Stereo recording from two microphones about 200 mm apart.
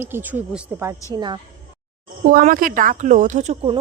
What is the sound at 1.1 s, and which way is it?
Speech, 20° right (ahead or behind).